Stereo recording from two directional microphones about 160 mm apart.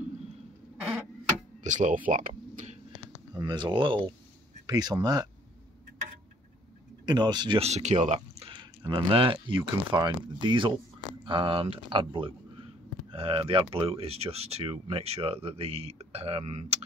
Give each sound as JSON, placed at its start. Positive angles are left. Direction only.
{"t": 1.6, "sound": "speech", "side_deg": -50}
{"t": 2.0, "sound": "insect", "side_deg": -55}
{"t": 3.3, "sound": "speech", "side_deg": -25}
{"t": 7.1, "sound": "speech", "side_deg": -25}
{"t": 8.5, "sound": "speech", "side_deg": -30}